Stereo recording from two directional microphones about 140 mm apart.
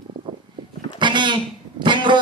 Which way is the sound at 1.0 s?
35° right (ahead or behind).